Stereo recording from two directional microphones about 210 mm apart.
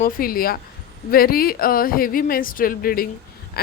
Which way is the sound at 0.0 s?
45° left (ahead or behind).